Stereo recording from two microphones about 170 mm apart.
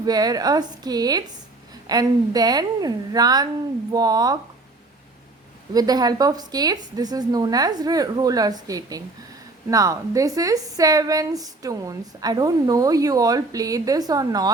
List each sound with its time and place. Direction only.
0.0 s a woman's voice: 20° right (ahead or behind)
5.7 s a woman's voice: 20° right (ahead or behind)